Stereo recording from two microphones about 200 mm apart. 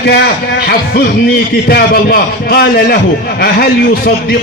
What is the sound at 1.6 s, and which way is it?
A man's voice, 50° left (ahead or behind).